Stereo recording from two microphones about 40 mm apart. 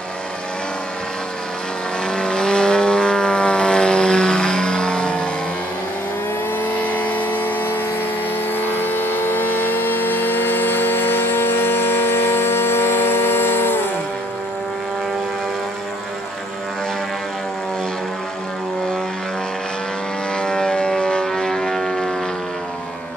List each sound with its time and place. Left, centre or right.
2.0 s vehicle: centre
6.7 s vehicle: left
9.1 s vehicle: left
20.3 s vehicle: left
21.3 s foghorn: centre